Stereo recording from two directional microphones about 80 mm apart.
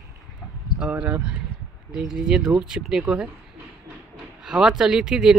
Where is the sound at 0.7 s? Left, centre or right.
Centre.